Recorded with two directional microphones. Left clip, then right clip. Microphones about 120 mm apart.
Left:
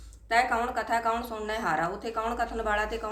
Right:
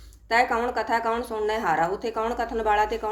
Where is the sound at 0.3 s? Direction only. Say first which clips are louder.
Right 3 dB; 30° right (ahead or behind).